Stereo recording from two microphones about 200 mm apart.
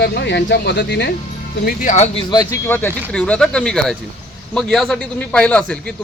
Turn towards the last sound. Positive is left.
turn(degrees=5)  # may be behind; listen again after turning